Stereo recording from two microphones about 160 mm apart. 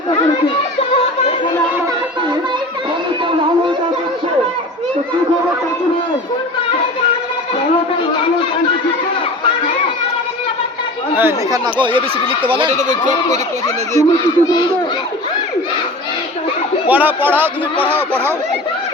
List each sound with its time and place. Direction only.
11.2 s a man's voice: 15° right (ahead or behind)
11.6 s speech: 30° right (ahead or behind)
12.7 s speech: 50° right (ahead or behind)
14.0 s speech: 20° left (ahead or behind)
16.9 s a man's voice: 10° right (ahead or behind)